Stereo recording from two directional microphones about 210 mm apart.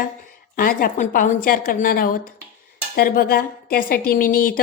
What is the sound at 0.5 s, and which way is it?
A woman's voice, 45° left (ahead or behind).